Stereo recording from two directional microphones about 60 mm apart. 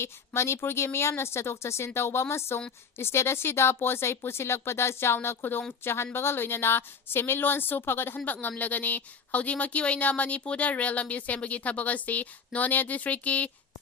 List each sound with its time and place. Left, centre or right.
0.0 s a woman's voice: left